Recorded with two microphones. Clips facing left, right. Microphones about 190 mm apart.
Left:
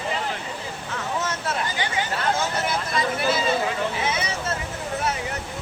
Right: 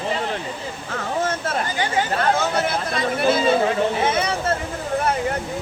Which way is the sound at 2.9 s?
55° right (ahead or behind).